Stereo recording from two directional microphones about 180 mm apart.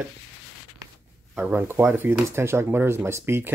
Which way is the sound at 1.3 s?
10° right (ahead or behind).